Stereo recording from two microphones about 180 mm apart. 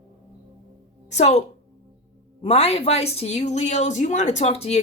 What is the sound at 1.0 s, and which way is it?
Speech, 40° left (ahead or behind).